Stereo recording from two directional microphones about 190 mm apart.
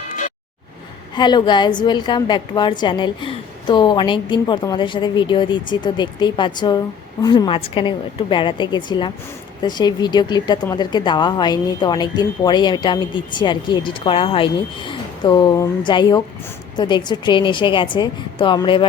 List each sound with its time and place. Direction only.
1.1 s a woman's voice: 25° left (ahead or behind)